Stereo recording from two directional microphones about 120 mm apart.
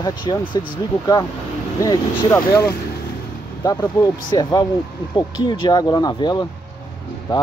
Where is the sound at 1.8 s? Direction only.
25° left (ahead or behind).